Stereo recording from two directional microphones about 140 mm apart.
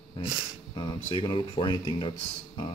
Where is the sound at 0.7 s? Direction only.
35° left (ahead or behind).